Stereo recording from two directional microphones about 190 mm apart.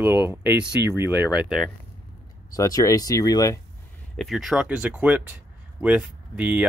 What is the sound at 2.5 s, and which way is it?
Speech, 20° left (ahead or behind).